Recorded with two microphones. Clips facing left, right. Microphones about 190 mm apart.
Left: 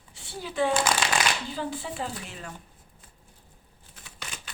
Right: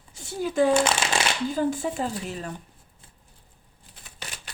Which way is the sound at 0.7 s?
25° right (ahead or behind).